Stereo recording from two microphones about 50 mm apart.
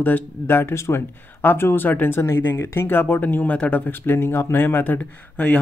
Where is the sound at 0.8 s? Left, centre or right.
Left.